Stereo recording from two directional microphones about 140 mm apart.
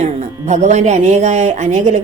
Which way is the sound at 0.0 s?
55° right (ahead or behind).